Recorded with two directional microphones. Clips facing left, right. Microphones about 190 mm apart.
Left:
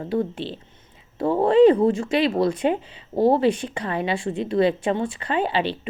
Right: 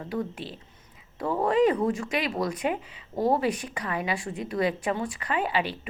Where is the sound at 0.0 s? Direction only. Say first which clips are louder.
Left 7 dB; 30° left (ahead or behind).